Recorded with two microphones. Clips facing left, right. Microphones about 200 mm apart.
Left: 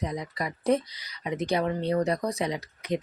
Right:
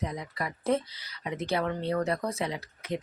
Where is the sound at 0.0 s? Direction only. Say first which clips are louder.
Left 3 dB; 15° left (ahead or behind).